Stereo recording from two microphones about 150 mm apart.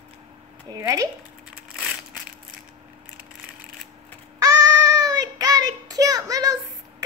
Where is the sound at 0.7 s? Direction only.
20° right (ahead or behind).